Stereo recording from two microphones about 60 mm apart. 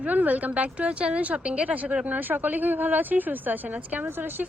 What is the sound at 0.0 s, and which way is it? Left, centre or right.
Speech, right.